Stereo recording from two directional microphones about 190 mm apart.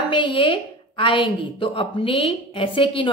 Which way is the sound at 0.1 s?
25° left (ahead or behind).